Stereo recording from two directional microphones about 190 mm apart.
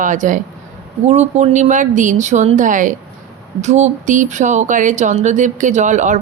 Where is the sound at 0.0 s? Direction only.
40° right (ahead or behind).